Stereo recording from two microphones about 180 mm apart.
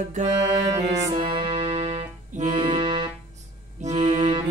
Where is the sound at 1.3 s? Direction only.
30° right (ahead or behind).